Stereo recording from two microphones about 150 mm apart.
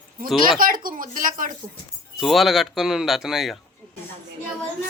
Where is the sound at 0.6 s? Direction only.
70° right (ahead or behind).